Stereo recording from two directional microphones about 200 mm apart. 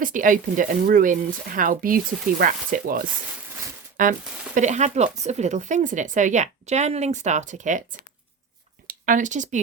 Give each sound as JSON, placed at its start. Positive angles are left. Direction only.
{"t": 0.0, "sound": "speech", "side_deg": -40}